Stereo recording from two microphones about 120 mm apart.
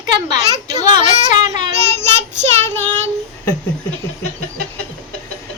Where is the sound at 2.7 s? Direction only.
15° left (ahead or behind).